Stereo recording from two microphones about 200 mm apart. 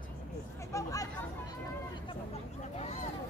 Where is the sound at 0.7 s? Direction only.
15° left (ahead or behind).